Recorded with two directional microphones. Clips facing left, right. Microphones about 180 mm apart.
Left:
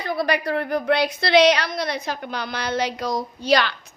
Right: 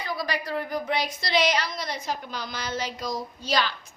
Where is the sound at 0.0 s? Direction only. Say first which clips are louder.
Left 7 dB; 60° left (ahead or behind).